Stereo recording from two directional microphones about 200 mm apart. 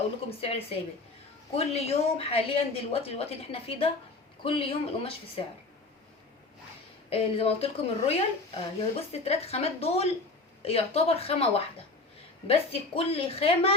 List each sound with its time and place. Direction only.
0.3 s a woman's voice: 30° left (ahead or behind)
7.1 s a woman's voice: 30° left (ahead or behind)